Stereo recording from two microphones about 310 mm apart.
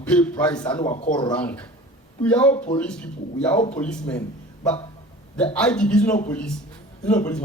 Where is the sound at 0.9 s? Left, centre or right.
Centre.